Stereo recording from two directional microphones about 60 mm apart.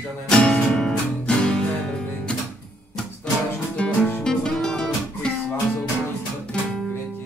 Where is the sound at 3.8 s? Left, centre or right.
Centre.